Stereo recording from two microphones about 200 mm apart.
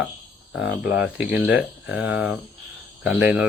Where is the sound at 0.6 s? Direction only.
60° left (ahead or behind).